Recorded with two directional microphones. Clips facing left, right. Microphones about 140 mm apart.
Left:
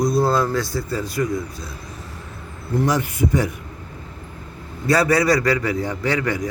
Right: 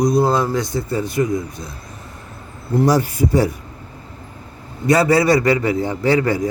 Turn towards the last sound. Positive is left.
turn(degrees=-30)  # may be behind; listen again after turning